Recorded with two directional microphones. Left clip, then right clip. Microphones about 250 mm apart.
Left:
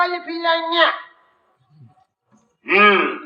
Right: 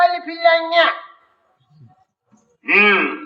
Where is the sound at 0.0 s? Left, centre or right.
Right.